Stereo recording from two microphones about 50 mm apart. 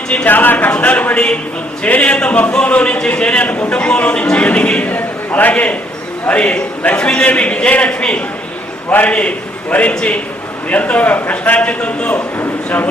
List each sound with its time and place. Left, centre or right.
0.3 s speech: left
0.7 s a man's voice: left
8.9 s a man's voice: left